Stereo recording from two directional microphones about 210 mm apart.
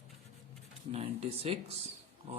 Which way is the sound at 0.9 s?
30° right (ahead or behind).